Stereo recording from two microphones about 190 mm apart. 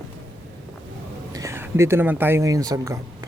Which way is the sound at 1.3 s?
15° right (ahead or behind).